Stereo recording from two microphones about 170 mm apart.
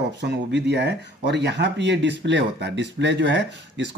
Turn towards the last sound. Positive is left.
turn(degrees=-90)